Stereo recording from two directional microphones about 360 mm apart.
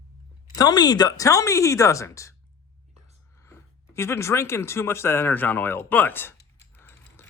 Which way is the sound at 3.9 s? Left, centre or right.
Centre.